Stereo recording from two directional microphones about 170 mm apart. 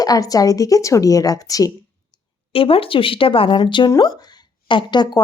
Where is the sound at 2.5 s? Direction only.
35° left (ahead or behind).